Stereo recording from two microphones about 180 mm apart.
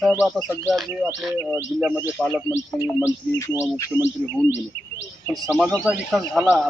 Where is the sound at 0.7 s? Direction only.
Centre (ahead or behind).